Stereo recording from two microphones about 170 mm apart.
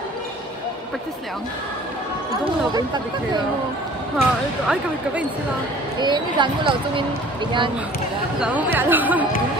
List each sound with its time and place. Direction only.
4.2 s speech: 5° right (ahead or behind)
5.9 s speech: 25° right (ahead or behind)
8.7 s speech: 10° right (ahead or behind)